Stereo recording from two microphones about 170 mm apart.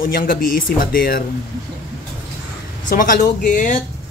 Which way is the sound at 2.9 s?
50° left (ahead or behind).